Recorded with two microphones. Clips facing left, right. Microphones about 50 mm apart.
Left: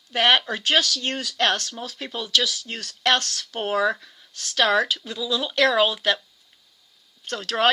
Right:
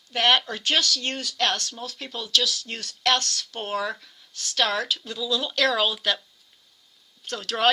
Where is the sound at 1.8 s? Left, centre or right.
Centre.